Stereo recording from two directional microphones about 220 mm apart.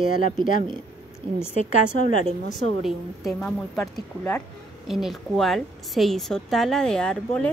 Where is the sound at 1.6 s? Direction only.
35° left (ahead or behind).